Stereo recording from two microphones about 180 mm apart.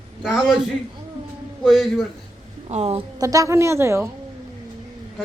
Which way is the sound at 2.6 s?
35° right (ahead or behind).